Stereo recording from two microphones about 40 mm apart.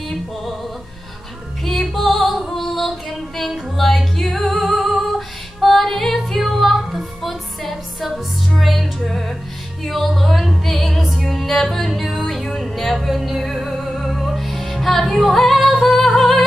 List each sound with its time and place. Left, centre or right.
1.6 s music: centre